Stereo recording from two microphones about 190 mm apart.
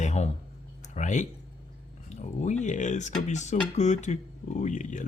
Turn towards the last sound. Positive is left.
turn(degrees=40)  # may be behind; listen again after turning